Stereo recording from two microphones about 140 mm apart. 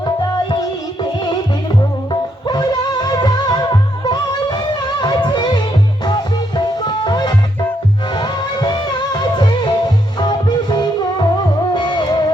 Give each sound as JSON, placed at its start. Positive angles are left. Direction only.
{"t": 2.5, "sound": "music", "side_deg": 30}